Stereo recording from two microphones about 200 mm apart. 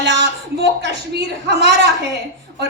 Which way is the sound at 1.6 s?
60° right (ahead or behind).